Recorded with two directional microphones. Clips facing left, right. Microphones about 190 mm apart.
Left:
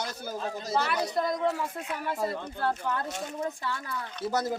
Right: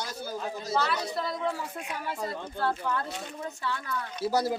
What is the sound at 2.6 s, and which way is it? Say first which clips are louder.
Speech: right 1 dB; 15° left (ahead or behind).